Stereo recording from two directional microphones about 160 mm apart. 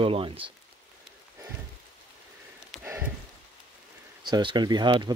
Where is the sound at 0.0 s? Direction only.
35° right (ahead or behind).